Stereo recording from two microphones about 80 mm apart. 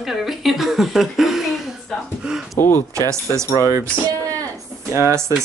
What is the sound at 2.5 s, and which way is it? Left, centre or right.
Speech, left.